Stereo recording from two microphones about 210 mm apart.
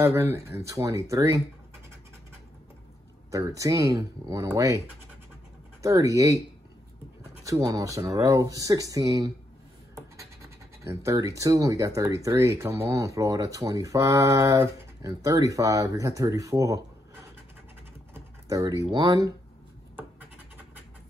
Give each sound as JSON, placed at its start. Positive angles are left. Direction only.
{"t": 0.0, "sound": "speech", "side_deg": -10}
{"t": 3.3, "sound": "speech", "side_deg": -15}
{"t": 7.4, "sound": "speech", "side_deg": -15}
{"t": 10.8, "sound": "speech", "side_deg": -15}
{"t": 18.1, "sound": "a sound", "side_deg": -15}
{"t": 18.9, "sound": "speech", "side_deg": -15}